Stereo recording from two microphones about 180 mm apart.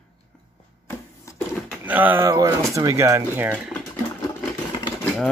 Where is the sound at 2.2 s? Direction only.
20° right (ahead or behind).